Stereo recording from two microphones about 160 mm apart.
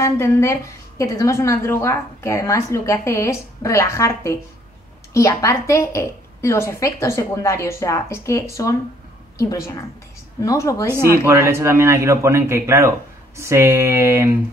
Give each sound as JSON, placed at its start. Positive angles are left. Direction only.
{"t": 0.0, "sound": "a woman's voice", "side_deg": 15}
{"t": 10.4, "sound": "speech", "side_deg": 20}
{"t": 11.2, "sound": "a man's voice", "side_deg": -15}